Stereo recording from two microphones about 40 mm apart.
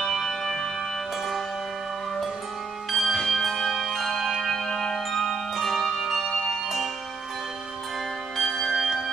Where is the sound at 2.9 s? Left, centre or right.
Centre.